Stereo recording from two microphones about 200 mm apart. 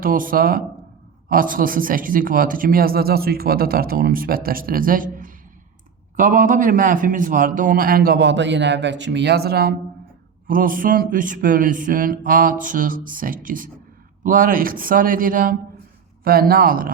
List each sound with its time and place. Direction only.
0.0 s speech: 45° right (ahead or behind)